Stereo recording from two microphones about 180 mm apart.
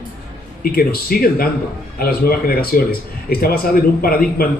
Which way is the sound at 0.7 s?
55° left (ahead or behind).